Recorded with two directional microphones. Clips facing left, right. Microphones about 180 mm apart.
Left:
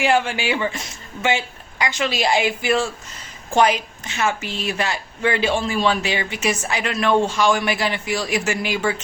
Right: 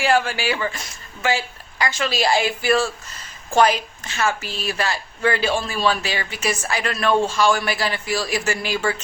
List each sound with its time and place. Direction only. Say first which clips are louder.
0.0 s a woman's voice: even; 20° left (ahead or behind)